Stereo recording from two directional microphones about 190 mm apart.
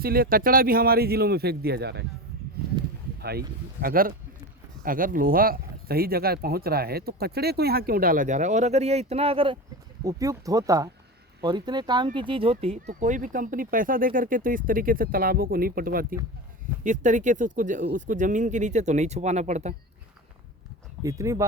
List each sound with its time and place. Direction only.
0.0 s speech: 50° right (ahead or behind)
2.6 s a sound: 55° right (ahead or behind)
3.8 s speech: 50° right (ahead or behind); by 9.6 s 30° right (ahead or behind)
10.0 s speech: 15° right (ahead or behind); by 19.7 s 35° right (ahead or behind)
21.0 s speech: 15° right (ahead or behind)